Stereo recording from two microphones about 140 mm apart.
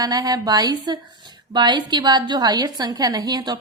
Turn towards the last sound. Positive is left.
turn(degrees=-30)  # may be behind; listen again after turning